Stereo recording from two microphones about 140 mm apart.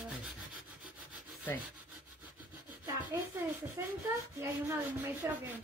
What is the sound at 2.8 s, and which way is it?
Speech, 15° right (ahead or behind).